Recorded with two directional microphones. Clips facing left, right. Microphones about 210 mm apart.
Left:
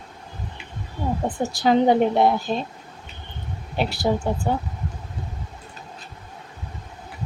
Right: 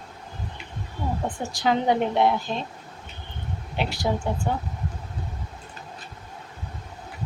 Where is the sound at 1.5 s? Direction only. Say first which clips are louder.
Left 5 dB; 35° left (ahead or behind).